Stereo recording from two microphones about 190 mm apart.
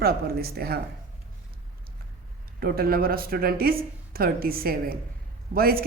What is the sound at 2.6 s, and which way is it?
Speech, 50° right (ahead or behind).